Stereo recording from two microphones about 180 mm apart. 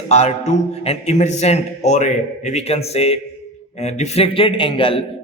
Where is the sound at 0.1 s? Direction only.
35° left (ahead or behind).